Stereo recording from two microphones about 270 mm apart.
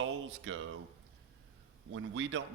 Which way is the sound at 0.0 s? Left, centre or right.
Right.